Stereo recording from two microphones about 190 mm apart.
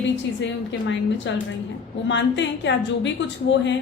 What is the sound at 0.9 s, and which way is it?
A woman's voice, 70° left (ahead or behind).